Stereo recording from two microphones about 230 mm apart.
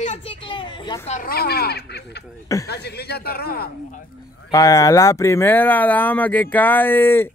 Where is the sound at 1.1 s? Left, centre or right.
Left.